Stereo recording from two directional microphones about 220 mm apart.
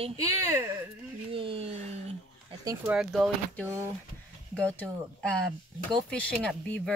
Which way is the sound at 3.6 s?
15° right (ahead or behind).